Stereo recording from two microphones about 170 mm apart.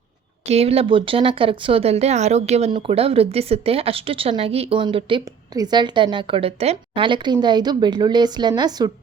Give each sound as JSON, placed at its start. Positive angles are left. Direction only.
{"t": 0.5, "sound": "a woman's voice", "side_deg": -35}